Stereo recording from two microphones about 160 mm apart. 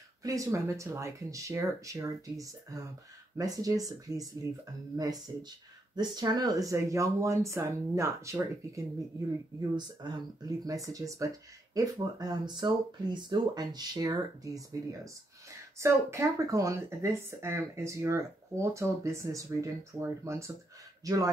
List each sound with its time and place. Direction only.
0.2 s a man's voice: 20° right (ahead or behind)